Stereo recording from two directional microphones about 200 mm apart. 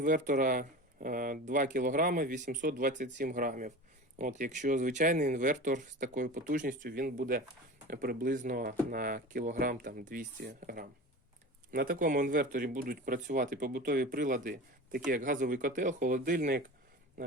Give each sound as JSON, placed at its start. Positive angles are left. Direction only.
{"t": 0.0, "sound": "speech", "side_deg": -40}